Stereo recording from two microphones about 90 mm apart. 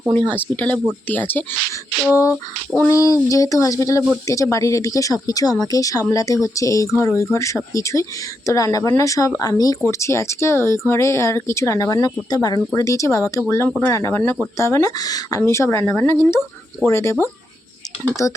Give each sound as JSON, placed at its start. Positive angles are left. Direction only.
{"t": 0.1, "sound": "speech", "side_deg": 20}
{"t": 2.0, "sound": "speech", "side_deg": 30}
{"t": 10.0, "sound": "speech", "side_deg": 30}
{"t": 15.4, "sound": "speech", "side_deg": 30}